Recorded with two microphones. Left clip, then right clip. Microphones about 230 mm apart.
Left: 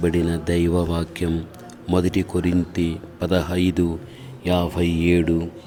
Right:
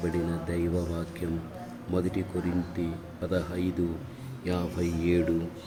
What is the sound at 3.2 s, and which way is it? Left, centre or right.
Speech, left.